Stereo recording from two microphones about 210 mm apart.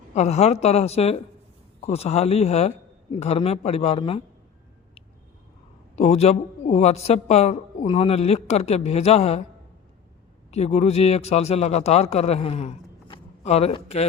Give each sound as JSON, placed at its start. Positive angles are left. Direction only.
{"t": 0.1, "sound": "a woman's voice", "side_deg": 30}
{"t": 6.0, "sound": "a woman's voice", "side_deg": 30}
{"t": 10.5, "sound": "a man's voice", "side_deg": 30}